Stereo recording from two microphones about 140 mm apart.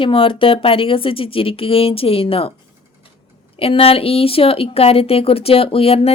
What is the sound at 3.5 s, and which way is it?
A woman's voice, 45° left (ahead or behind).